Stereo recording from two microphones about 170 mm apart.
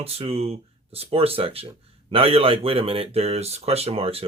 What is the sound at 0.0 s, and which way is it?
A man's voice, 35° right (ahead or behind).